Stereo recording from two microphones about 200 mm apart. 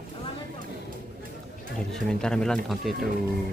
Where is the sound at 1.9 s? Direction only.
5° left (ahead or behind).